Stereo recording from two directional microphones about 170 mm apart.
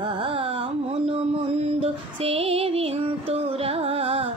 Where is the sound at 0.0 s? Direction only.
30° right (ahead or behind).